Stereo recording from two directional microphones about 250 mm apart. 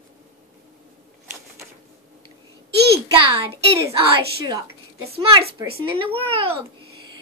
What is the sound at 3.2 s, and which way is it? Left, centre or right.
A child's voice, right.